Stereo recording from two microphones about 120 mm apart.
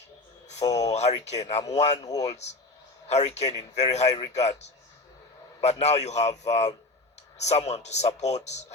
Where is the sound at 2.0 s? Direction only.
30° left (ahead or behind).